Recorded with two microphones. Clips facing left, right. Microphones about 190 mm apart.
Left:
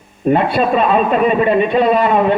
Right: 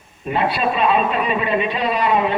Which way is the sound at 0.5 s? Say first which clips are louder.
Left 5 dB; 45° left (ahead or behind).